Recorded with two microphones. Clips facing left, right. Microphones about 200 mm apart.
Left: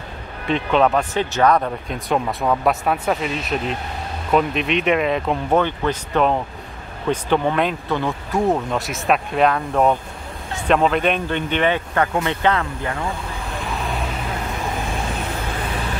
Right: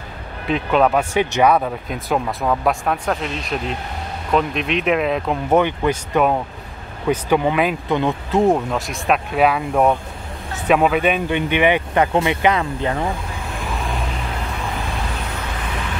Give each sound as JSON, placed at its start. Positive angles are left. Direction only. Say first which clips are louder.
{"t": 0.5, "sound": "speech", "louder": "right 1 dB", "side_deg": -5}
{"t": 5.6, "sound": "speech", "louder": "right 2 dB", "side_deg": -15}
{"t": 8.5, "sound": "speech", "louder": "right 1 dB", "side_deg": 0}